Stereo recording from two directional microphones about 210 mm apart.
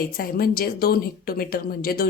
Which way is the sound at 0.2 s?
45° left (ahead or behind).